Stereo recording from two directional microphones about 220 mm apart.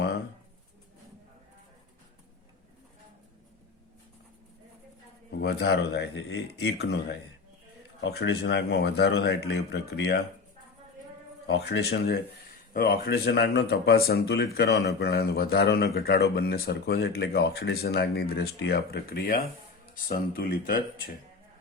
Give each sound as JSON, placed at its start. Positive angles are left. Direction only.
{"t": 5.4, "sound": "speech", "side_deg": 45}
{"t": 11.6, "sound": "speech", "side_deg": 50}